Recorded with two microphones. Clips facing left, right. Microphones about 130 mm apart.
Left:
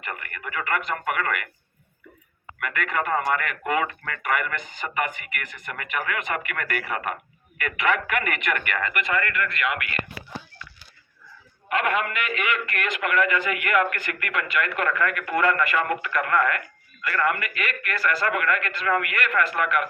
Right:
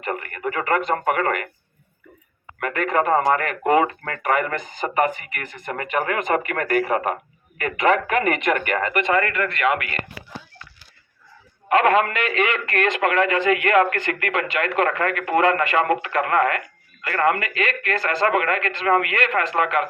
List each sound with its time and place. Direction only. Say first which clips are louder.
0.0 s speech: right 9 dB; 35° right (ahead or behind)
2.6 s speech: right 6 dB; 35° right (ahead or behind)
11.7 s speech: right 7 dB; 35° right (ahead or behind)